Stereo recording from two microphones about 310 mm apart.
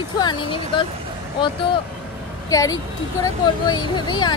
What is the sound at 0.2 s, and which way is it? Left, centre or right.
Speech, centre.